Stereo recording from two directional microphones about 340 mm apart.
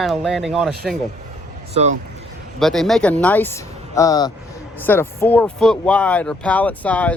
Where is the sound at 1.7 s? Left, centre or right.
Centre.